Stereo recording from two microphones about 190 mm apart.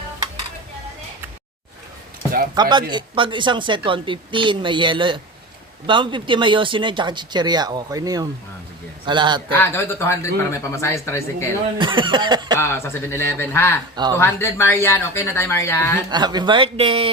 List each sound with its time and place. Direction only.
2.6 s speech: 20° right (ahead or behind)
9.6 s speech: 15° left (ahead or behind)
11.8 s speech: 25° right (ahead or behind)
12.5 s speech: 15° left (ahead or behind)
13.9 s speech: 20° right (ahead or behind)
14.2 s speech: 15° left (ahead or behind)
16.0 s speech: 20° right (ahead or behind)